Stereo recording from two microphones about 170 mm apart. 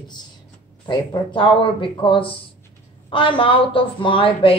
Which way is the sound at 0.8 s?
30° left (ahead or behind).